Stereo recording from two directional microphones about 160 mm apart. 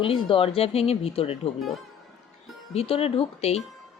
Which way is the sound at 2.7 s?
35° left (ahead or behind).